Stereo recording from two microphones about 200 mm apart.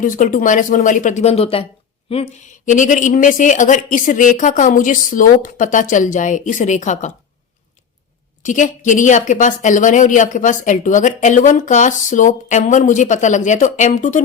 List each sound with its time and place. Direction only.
0.0 s a woman's voice: 40° left (ahead or behind)
8.4 s a woman's voice: 40° left (ahead or behind)